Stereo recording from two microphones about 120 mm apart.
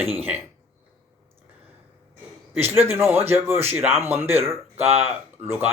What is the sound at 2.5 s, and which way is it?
A man's voice, 20° right (ahead or behind).